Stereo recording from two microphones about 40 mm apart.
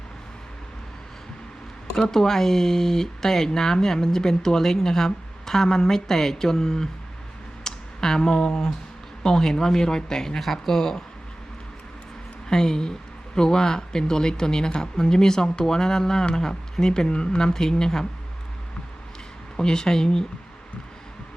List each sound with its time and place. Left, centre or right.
1.9 s speech: centre
7.6 s a sound: centre
9.2 s speech: centre
12.5 s speech: centre
19.5 s speech: centre